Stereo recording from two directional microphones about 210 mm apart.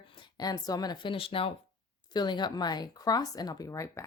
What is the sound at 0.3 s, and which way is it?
A woman's voice, 20° left (ahead or behind).